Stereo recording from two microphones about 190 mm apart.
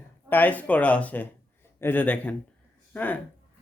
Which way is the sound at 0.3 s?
10° left (ahead or behind).